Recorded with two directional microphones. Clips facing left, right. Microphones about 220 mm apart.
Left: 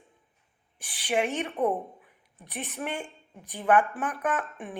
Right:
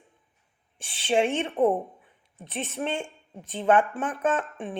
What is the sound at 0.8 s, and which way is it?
A woman's voice, 25° right (ahead or behind).